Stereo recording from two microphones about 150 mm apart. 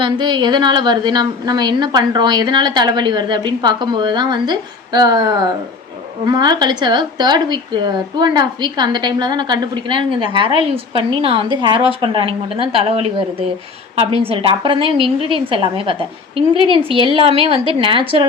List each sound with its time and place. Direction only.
0.0 s a woman's voice: 30° right (ahead or behind)